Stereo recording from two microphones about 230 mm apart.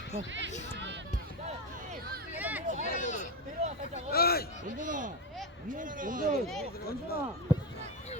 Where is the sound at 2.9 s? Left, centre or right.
Left.